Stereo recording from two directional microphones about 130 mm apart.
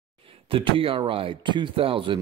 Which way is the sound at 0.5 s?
45° right (ahead or behind).